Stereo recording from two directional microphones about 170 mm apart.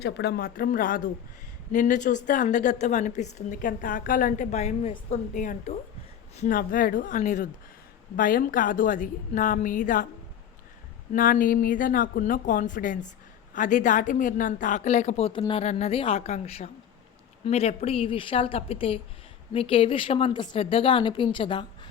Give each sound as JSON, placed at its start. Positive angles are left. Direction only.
{"t": 0.0, "sound": "a woman's voice", "side_deg": 75}
{"t": 6.6, "sound": "a woman's voice", "side_deg": 55}
{"t": 11.1, "sound": "a woman's voice", "side_deg": 55}